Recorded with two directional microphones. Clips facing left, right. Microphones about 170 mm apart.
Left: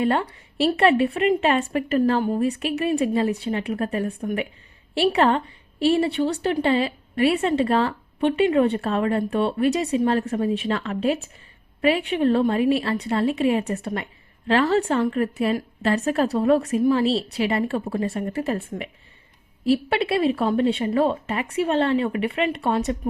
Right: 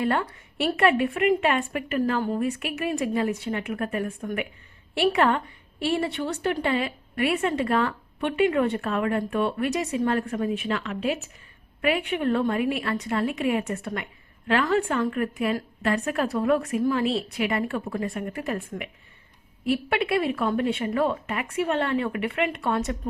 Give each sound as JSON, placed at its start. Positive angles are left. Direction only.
{"t": 0.0, "sound": "speech", "side_deg": 25}
{"t": 2.2, "sound": "speech", "side_deg": 20}
{"t": 2.5, "sound": "speech", "side_deg": 30}
{"t": 4.9, "sound": "a woman's voice", "side_deg": 25}